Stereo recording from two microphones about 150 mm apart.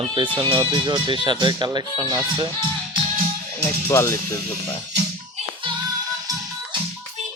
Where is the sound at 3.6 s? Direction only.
20° left (ahead or behind).